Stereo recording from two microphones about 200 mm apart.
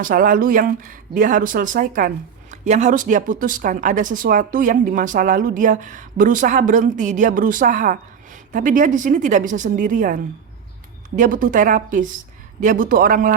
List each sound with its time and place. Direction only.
0.0 s speech: 45° right (ahead or behind)
11.2 s speech: 40° right (ahead or behind)